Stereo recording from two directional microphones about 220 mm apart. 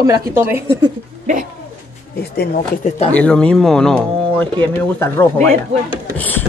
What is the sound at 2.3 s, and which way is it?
Speech, 45° left (ahead or behind).